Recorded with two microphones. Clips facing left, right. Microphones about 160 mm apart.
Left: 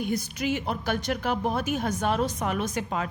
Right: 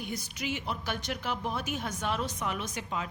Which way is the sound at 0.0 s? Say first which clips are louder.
Left 8 dB; 50° left (ahead or behind).